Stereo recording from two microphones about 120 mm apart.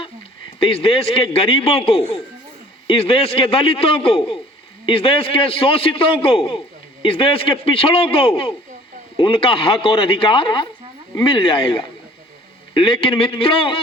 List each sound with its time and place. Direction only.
0.7 s a man's voice: 55° left (ahead or behind)